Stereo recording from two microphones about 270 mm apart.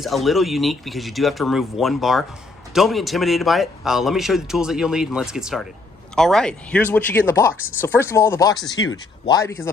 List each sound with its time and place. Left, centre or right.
0.0 s speech: centre